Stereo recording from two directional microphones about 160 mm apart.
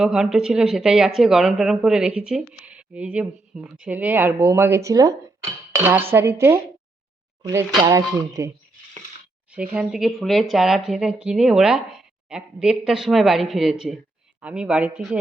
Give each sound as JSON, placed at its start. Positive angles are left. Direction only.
{"t": 0.0, "sound": "speech", "side_deg": -5}
{"t": 5.7, "sound": "dishes", "side_deg": -15}
{"t": 7.4, "sound": "speech", "side_deg": -15}
{"t": 9.5, "sound": "speech", "side_deg": -5}
{"t": 14.4, "sound": "dishes", "side_deg": -5}